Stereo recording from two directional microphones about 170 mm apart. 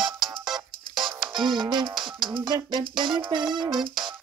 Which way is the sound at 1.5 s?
30° right (ahead or behind).